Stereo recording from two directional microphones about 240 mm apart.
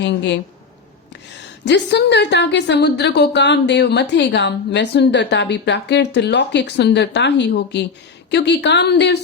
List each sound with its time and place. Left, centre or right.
0.0 s a woman's voice: left
1.6 s a woman's voice: left